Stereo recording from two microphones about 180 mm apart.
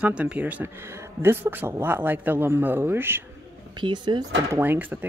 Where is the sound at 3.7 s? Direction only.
25° right (ahead or behind).